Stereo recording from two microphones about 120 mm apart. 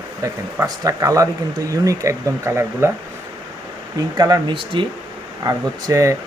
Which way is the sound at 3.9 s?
30° right (ahead or behind).